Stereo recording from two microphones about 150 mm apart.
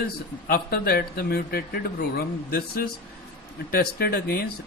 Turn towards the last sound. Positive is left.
turn(degrees=90)